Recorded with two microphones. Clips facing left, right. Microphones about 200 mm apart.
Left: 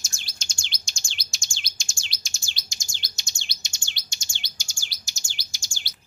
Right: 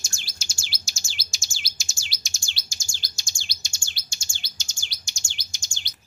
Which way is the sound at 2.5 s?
20° left (ahead or behind).